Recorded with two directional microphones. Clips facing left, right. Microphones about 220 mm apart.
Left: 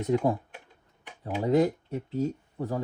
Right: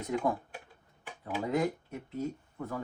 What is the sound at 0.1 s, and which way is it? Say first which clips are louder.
Speech: left 5 dB; 30° left (ahead or behind).